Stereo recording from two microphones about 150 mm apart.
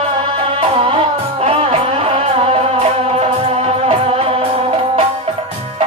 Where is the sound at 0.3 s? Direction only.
40° right (ahead or behind).